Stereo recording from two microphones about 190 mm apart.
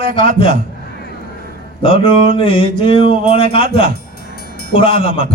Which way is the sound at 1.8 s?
30° left (ahead or behind).